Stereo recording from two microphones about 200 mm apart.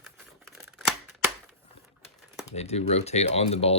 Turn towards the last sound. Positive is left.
turn(degrees=30)  # may be behind; listen again after turning